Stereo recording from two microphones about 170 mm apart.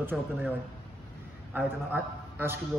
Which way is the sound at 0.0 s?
10° right (ahead or behind).